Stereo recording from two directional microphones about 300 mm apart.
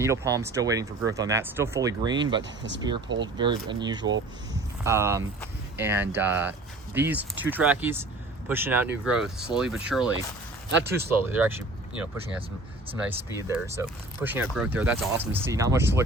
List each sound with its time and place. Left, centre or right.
0.0 s speech: centre
2.4 s speech: right
3.3 s speech: centre
11.3 s speech: centre
13.1 s speech: centre